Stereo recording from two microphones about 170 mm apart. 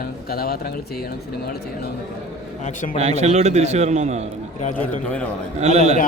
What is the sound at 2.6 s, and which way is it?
Speech, 45° left (ahead or behind).